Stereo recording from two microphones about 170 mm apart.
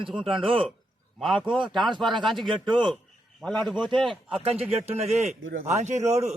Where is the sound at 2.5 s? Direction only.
30° right (ahead or behind).